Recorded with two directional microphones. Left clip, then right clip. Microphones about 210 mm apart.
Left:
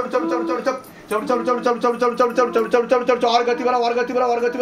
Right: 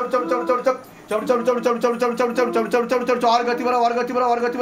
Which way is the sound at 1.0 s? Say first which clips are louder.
Right 1 dB; 50° right (ahead or behind).